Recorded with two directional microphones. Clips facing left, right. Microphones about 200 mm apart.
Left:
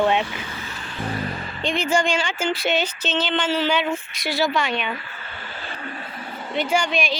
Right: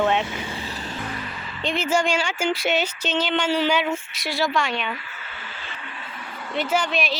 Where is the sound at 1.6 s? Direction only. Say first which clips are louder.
Left 1 dB; 5° right (ahead or behind).